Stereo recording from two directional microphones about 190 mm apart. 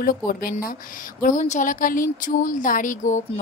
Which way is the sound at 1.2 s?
40° left (ahead or behind).